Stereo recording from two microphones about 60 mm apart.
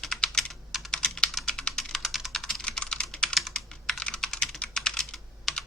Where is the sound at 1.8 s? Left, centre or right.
Centre.